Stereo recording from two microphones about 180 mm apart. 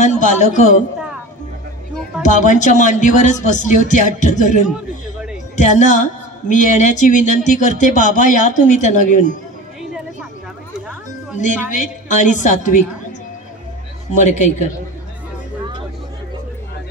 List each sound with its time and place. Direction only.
0.0 s a man's voice: 40° left (ahead or behind)
2.2 s speech: 45° left (ahead or behind)
5.6 s speech: 40° left (ahead or behind)
11.3 s speech: 45° left (ahead or behind)
14.1 s speech: 45° left (ahead or behind)